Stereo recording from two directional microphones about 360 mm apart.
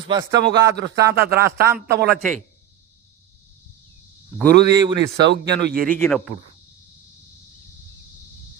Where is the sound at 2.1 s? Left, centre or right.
Centre.